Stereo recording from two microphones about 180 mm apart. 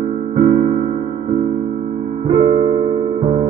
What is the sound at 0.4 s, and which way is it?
Electric piano, 50° right (ahead or behind).